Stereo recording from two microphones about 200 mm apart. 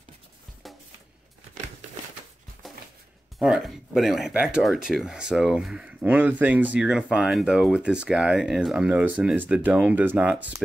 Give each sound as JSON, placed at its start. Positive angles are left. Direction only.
{"t": 3.3, "sound": "speech", "side_deg": -5}